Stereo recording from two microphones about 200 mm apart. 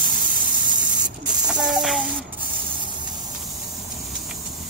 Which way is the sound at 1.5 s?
Centre (ahead or behind).